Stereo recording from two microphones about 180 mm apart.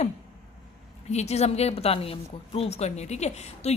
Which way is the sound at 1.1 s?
35° left (ahead or behind).